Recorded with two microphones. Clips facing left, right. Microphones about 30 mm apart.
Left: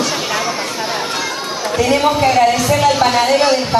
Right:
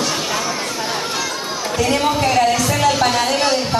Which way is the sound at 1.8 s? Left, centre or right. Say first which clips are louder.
Left 4 dB; centre.